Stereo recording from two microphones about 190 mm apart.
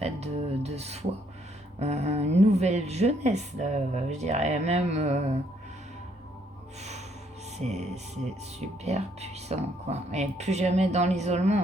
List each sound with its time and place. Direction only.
0.0 s speech: 35° right (ahead or behind)
7.6 s speech: 35° right (ahead or behind)